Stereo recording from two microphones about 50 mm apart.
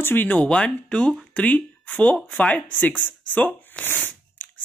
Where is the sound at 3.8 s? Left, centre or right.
Left.